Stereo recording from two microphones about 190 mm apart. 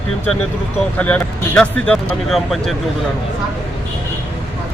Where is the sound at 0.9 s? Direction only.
5° left (ahead or behind).